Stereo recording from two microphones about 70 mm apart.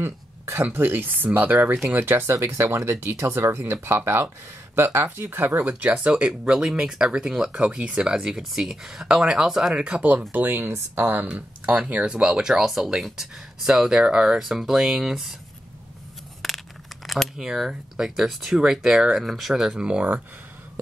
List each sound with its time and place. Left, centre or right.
0.0 s speech: right; by 15.3 s centre
16.4 s speech: centre